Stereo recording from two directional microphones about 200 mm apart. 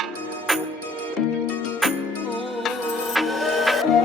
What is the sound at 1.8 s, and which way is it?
Music, centre (ahead or behind).